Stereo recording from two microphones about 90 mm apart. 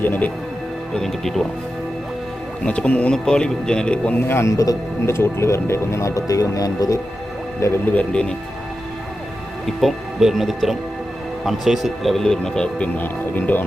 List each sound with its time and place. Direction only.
0.0 s speech: 20° left (ahead or behind)
0.9 s speech: 5° left (ahead or behind)
2.6 s speech: 15° left (ahead or behind)
4.3 s speech: 30° left (ahead or behind)
5.0 s speech: 30° left (ahead or behind)
7.6 s speech: 30° left (ahead or behind)
7.9 s speech: 10° left (ahead or behind)
9.6 s speech: centre (ahead or behind); by 13.7 s 20° left (ahead or behind)